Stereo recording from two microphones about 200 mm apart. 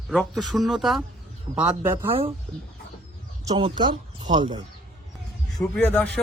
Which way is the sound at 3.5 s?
25° right (ahead or behind).